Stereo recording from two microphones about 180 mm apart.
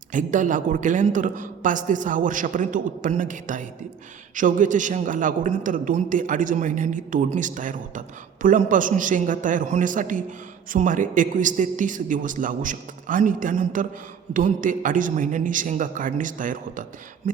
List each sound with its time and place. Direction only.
0.1 s a man's voice: 45° right (ahead or behind)